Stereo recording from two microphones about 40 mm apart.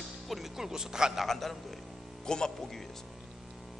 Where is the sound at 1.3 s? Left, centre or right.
Centre.